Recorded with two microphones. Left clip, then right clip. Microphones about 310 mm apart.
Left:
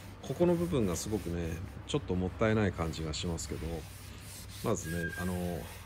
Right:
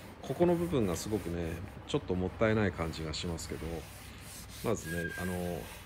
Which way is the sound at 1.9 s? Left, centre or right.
Centre.